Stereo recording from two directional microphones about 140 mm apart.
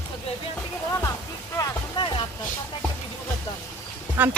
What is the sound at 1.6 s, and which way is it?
Music, 35° left (ahead or behind).